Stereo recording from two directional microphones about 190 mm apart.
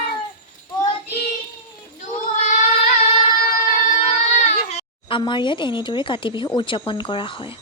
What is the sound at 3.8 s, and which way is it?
Speech, 40° left (ahead or behind).